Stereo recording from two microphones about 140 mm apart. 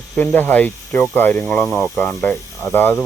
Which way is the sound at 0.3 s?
10° left (ahead or behind).